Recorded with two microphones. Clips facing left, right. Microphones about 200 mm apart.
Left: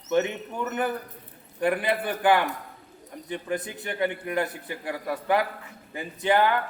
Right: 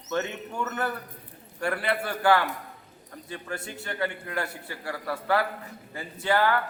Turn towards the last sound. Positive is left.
turn(degrees=20)  # may be behind; listen again after turning